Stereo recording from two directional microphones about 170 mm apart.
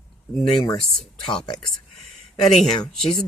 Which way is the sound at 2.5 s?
Centre (ahead or behind).